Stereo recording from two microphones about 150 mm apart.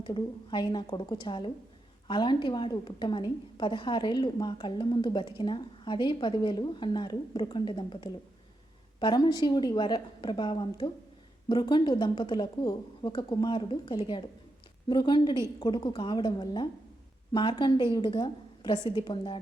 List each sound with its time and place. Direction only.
0.0 s a woman's voice: 30° left (ahead or behind)